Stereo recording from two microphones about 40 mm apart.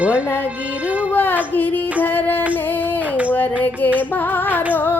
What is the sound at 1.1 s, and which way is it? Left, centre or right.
Music, left.